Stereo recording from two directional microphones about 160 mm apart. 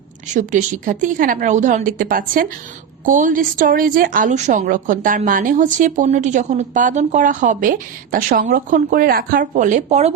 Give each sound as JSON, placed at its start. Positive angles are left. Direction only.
{"t": 0.3, "sound": "a woman's voice", "side_deg": -50}